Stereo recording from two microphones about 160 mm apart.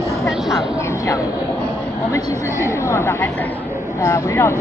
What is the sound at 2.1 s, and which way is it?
A woman's voice, 20° left (ahead or behind).